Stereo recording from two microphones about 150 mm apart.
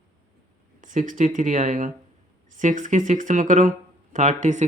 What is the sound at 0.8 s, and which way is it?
Speech, 60° right (ahead or behind).